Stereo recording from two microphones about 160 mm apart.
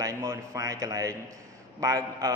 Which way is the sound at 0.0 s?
20° right (ahead or behind).